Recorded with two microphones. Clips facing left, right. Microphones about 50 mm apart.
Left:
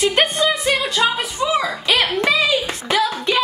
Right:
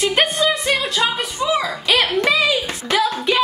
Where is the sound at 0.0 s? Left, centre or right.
Centre.